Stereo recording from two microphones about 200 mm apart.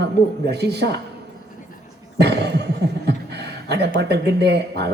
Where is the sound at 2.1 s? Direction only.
55° right (ahead or behind).